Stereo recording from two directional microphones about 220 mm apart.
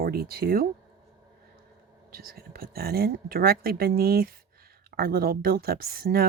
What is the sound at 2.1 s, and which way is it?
Speech, 45° right (ahead or behind).